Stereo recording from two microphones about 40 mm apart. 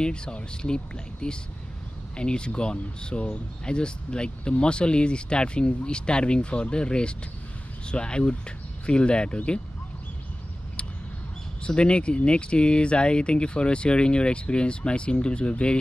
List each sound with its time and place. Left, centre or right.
0.0 s speech: left
11.6 s speech: left